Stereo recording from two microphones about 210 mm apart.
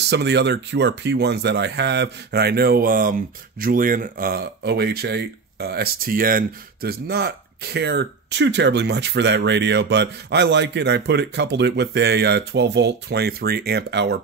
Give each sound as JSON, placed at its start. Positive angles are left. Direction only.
{"t": 0.1, "sound": "speech", "side_deg": -55}